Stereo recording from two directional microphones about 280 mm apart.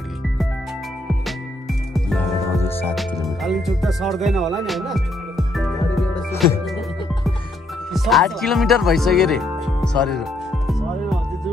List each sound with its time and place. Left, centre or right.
2.0 s speech: centre
7.9 s speech: centre